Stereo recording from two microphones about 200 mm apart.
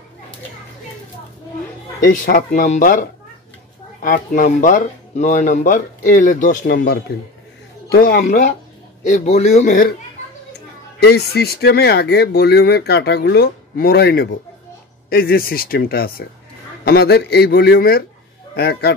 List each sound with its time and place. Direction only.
2.0 s speech: 45° left (ahead or behind)
11.0 s speech: 55° left (ahead or behind)